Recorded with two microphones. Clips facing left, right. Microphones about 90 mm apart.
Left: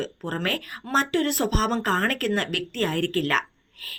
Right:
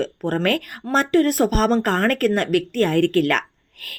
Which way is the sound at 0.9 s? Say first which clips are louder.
Right 6 dB; 45° right (ahead or behind).